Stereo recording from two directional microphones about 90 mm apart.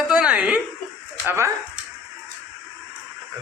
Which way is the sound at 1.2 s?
30° right (ahead or behind).